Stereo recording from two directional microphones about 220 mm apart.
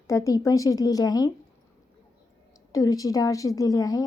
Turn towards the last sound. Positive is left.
turn(degrees=15)  # may be behind; listen again after turning